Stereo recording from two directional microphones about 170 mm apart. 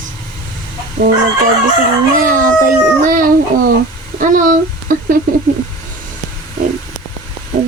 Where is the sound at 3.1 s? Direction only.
55° right (ahead or behind).